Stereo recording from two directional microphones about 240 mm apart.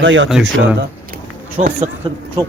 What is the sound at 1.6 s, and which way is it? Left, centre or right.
Speech, right.